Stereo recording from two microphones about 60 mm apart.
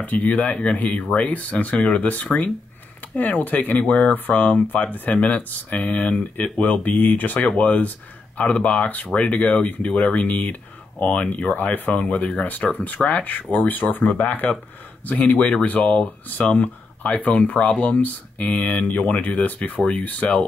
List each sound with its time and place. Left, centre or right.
0.0 s speech: left